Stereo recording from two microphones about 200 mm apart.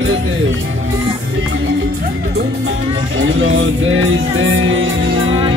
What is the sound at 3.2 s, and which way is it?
Music, 75° right (ahead or behind).